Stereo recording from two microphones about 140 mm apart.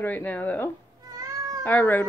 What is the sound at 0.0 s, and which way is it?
Speech, 10° left (ahead or behind).